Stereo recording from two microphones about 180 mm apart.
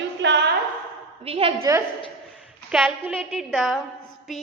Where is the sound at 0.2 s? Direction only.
75° right (ahead or behind).